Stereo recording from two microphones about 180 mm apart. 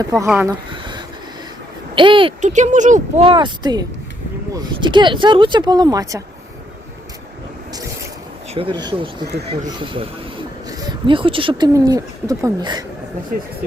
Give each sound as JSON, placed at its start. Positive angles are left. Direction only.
{"t": 0.0, "sound": "speech", "side_deg": -15}
{"t": 2.0, "sound": "speech", "side_deg": -30}
{"t": 2.4, "sound": "speech", "side_deg": -40}
{"t": 3.2, "sound": "speech", "side_deg": -25}
{"t": 8.5, "sound": "speech", "side_deg": -25}